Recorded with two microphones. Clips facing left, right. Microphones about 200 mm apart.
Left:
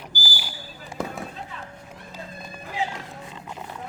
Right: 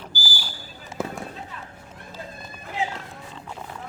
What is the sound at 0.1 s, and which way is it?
Basketball bounce, 15° left (ahead or behind).